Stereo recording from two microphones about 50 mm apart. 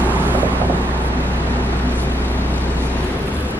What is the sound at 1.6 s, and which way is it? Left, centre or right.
Vehicle, left.